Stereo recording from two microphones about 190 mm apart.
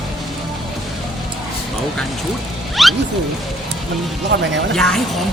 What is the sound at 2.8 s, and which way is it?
Music, centre (ahead or behind).